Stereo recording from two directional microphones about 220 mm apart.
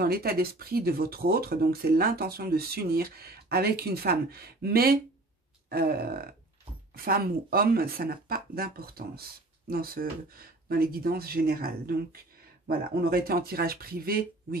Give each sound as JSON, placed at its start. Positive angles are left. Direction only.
{"t": 0.0, "sound": "speech", "side_deg": -45}